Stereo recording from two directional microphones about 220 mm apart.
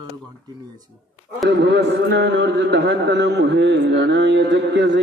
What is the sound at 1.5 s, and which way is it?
A man's voice, 55° right (ahead or behind).